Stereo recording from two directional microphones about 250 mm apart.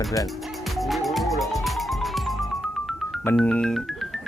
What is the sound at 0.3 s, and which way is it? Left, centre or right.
Music, centre.